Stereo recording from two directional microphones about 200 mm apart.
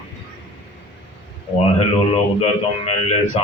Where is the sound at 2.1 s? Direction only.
30° left (ahead or behind).